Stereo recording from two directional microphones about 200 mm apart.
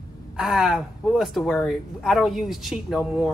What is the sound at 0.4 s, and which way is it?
Speech, centre (ahead or behind).